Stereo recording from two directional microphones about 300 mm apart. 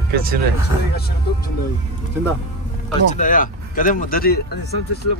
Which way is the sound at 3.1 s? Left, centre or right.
Left.